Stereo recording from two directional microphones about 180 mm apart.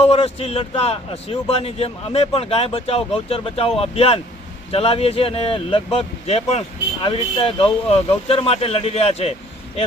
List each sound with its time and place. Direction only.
0.0 s speech: 35° left (ahead or behind)